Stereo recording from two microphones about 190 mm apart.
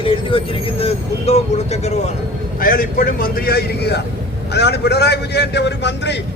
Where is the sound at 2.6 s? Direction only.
50° left (ahead or behind).